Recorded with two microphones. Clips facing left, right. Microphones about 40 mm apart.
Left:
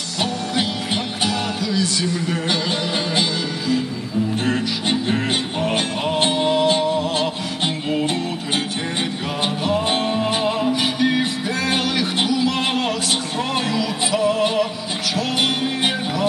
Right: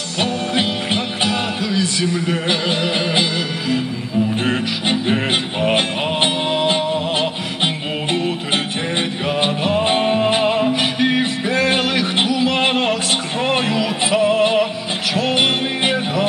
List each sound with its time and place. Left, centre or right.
0.2 s music: right
1.6 s a man's voice: right
4.4 s music: right